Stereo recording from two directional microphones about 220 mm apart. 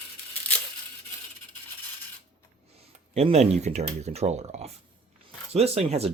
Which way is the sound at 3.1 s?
30° right (ahead or behind).